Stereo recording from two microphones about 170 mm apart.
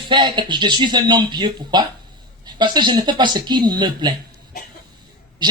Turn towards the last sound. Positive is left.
turn(degrees=-25)  # may be behind; listen again after turning